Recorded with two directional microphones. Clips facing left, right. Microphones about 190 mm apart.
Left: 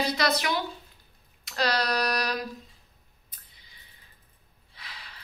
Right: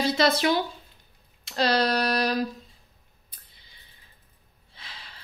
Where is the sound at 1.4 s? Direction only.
25° right (ahead or behind).